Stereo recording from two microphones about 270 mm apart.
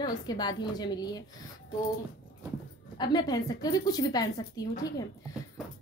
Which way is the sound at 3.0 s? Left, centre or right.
Centre.